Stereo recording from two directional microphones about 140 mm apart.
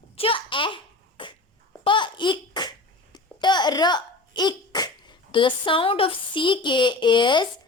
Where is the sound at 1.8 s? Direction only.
35° left (ahead or behind).